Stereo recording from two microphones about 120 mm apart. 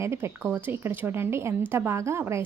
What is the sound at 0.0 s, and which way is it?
A woman's voice, 20° right (ahead or behind).